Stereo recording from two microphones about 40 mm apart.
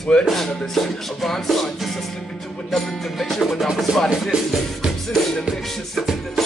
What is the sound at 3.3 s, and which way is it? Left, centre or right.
Music, centre.